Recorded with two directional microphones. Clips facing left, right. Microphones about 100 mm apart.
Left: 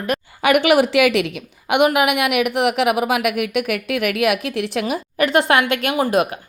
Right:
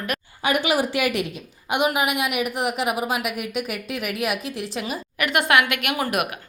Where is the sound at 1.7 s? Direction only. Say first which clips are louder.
Left 6 dB; 65° left (ahead or behind).